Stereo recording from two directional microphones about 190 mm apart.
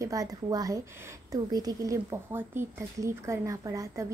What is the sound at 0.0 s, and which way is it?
Speech, 20° right (ahead or behind).